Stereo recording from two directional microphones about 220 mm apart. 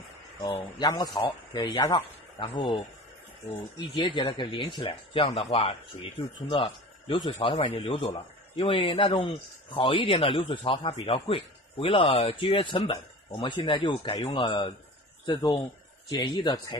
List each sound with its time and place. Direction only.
0.6 s a man's voice: 20° left (ahead or behind)